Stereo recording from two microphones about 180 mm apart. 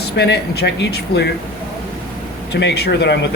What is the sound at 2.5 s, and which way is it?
Speech, 70° left (ahead or behind).